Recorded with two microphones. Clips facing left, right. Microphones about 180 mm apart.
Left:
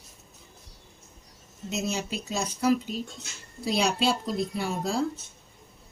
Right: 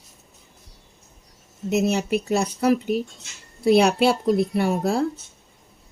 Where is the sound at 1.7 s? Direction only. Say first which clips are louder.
Right 10 dB; 65° right (ahead or behind).